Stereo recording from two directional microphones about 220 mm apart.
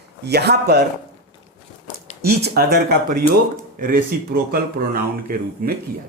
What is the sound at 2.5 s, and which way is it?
Speech, 45° right (ahead or behind).